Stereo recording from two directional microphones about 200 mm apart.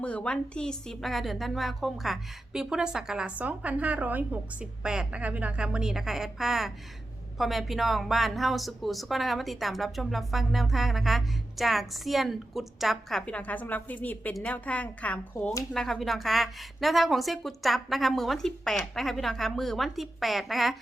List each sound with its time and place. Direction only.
0.0 s speech: 5° left (ahead or behind)